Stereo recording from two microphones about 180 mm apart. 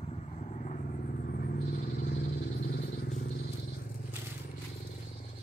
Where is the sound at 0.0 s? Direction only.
35° left (ahead or behind).